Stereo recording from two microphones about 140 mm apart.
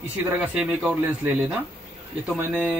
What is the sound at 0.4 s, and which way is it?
Speech, 5° right (ahead or behind).